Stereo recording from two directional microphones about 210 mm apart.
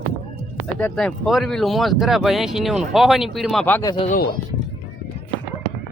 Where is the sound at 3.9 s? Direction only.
25° left (ahead or behind).